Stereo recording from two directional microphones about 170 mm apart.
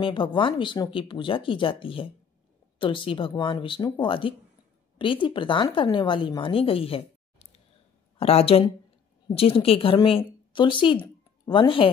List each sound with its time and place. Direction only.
0.0 s speech: 30° left (ahead or behind)